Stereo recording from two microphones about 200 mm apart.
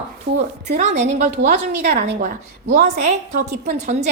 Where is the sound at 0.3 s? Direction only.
60° right (ahead or behind).